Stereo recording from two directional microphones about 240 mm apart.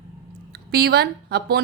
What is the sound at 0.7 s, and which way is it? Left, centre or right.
Speech, right.